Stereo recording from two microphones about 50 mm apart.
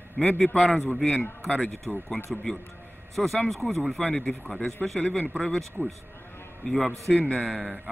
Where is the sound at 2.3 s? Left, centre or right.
Centre.